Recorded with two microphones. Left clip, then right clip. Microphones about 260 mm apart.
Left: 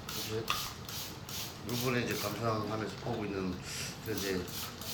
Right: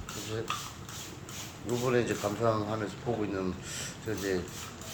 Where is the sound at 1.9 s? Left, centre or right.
Right.